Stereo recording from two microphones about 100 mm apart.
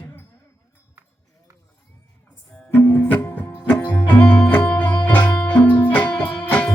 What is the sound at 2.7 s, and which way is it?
Music, 20° left (ahead or behind).